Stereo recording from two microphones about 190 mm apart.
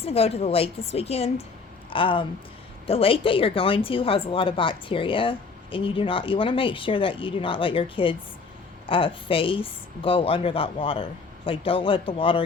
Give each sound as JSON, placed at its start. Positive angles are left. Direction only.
{"t": 0.0, "sound": "a woman's voice", "side_deg": 30}